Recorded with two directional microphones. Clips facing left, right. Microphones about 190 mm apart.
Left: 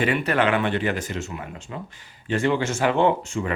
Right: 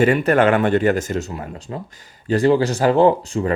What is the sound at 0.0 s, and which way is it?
Speech, 45° right (ahead or behind).